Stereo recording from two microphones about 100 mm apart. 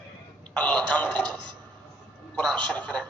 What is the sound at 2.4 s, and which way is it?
Speech, 10° left (ahead or behind).